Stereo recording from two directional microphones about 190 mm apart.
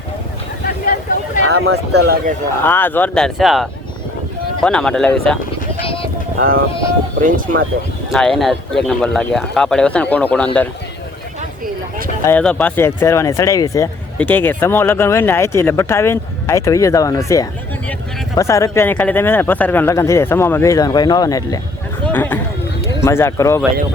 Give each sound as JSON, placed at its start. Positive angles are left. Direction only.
{"t": 1.5, "sound": "speech", "side_deg": -90}
{"t": 2.6, "sound": "speech", "side_deg": 10}
{"t": 5.8, "sound": "a sound", "side_deg": 30}
{"t": 7.2, "sound": "speech", "side_deg": -45}
{"t": 8.1, "sound": "speech", "side_deg": 0}
{"t": 12.2, "sound": "speech", "side_deg": 5}
{"t": 22.0, "sound": "a sound", "side_deg": 10}
{"t": 23.0, "sound": "speech", "side_deg": 15}